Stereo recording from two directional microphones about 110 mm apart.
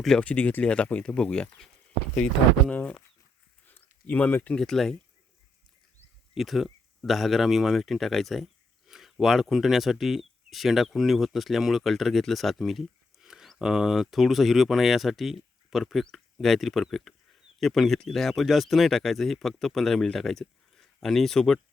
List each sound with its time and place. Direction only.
0.0 s speech: 5° left (ahead or behind)
3.7 s a sound: 15° left (ahead or behind)
4.5 s speech: 5° left (ahead or behind)
6.3 s speech: centre (ahead or behind)